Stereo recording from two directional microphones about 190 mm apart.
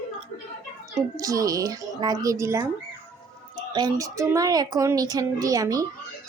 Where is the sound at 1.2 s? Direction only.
20° right (ahead or behind).